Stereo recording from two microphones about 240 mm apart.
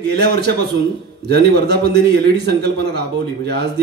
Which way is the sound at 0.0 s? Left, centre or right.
Right.